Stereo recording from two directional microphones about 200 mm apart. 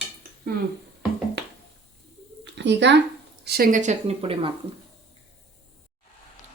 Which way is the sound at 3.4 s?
50° right (ahead or behind).